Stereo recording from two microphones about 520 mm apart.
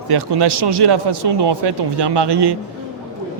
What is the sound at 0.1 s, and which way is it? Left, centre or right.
A man's voice, right.